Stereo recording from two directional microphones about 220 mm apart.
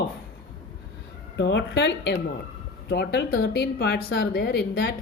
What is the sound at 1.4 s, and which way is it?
Speech, 55° left (ahead or behind).